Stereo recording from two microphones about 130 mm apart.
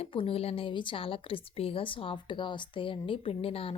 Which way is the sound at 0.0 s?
45° left (ahead or behind).